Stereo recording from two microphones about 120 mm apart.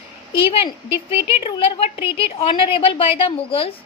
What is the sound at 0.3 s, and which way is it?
A woman's voice, 45° left (ahead or behind).